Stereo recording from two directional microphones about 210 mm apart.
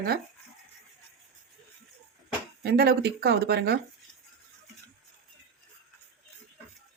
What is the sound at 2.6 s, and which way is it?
A woman's voice, 50° right (ahead or behind).